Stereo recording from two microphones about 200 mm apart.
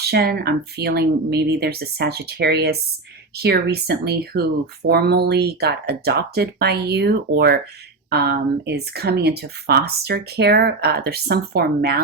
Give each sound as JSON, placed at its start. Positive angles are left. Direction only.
{"t": 0.0, "sound": "speech", "side_deg": -50}